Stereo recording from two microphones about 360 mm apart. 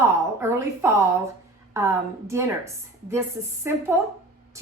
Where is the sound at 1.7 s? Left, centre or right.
Centre.